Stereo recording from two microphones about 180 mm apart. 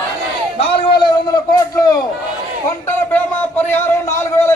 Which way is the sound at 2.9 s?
10° left (ahead or behind).